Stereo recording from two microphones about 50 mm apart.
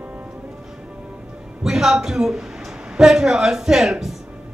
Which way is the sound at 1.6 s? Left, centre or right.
Centre.